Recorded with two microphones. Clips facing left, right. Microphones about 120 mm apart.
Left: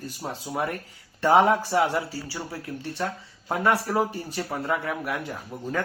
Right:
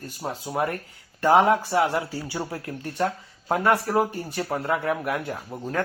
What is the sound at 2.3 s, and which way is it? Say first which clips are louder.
Speech: right 4 dB; 20° right (ahead or behind).